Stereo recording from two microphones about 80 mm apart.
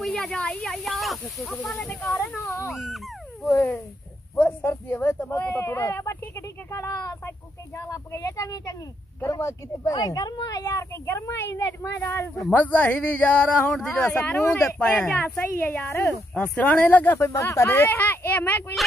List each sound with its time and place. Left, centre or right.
0.0 s speech: centre
0.8 s speech: centre; by 9.9 s left
9.9 s speech: left
12.4 s speech: centre
15.9 s speech: left
16.5 s speech: centre
17.3 s speech: left
17.6 s speech: left